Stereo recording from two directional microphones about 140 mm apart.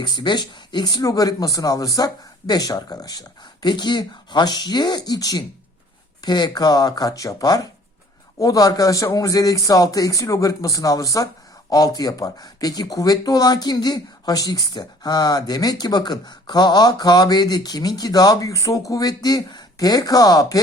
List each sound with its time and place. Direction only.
0.0 s speech: 30° left (ahead or behind)